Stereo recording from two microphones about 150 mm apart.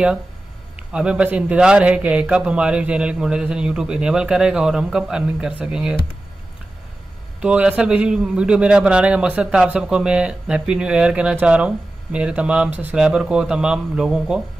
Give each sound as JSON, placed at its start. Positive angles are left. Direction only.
{"t": 0.7, "sound": "a man's voice", "side_deg": -5}
{"t": 7.4, "sound": "a man's voice", "side_deg": -5}